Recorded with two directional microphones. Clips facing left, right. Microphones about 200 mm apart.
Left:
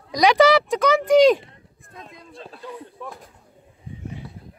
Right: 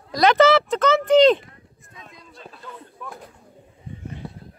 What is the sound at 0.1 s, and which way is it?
Speech, 15° left (ahead or behind).